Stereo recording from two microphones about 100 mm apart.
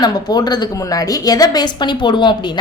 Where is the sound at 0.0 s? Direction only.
40° left (ahead or behind).